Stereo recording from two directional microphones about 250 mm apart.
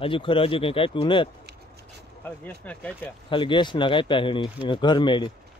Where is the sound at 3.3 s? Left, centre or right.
Centre.